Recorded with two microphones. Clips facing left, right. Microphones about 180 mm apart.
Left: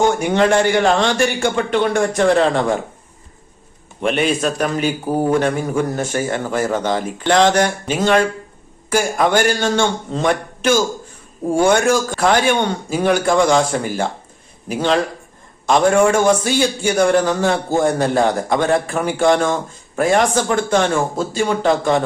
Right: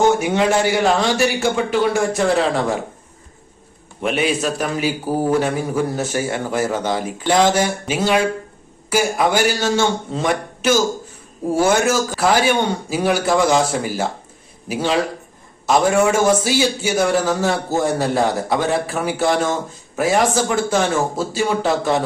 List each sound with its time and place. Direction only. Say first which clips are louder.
0.1 s a man's voice: left 1 dB; 5° right (ahead or behind)
4.0 s a man's voice: left 2 dB; centre (ahead or behind)